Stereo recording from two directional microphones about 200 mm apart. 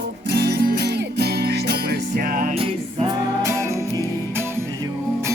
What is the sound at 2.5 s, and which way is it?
Music, 30° right (ahead or behind).